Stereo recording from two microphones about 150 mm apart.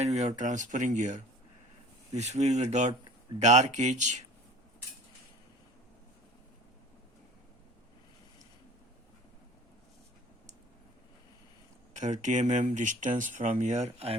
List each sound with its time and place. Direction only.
0.0 s speech: 50° right (ahead or behind)
11.9 s speech: 55° right (ahead or behind)